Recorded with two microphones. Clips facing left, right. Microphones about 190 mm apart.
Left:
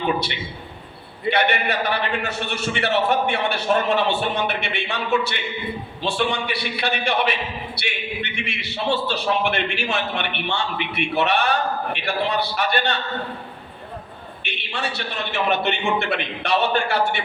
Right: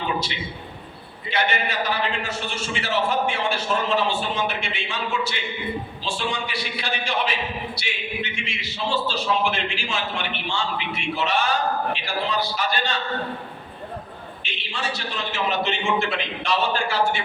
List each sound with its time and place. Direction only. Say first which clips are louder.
1.3 s a man's voice: left 4 dB; 60° left (ahead or behind)
14.4 s a man's voice: left 2 dB; 60° left (ahead or behind)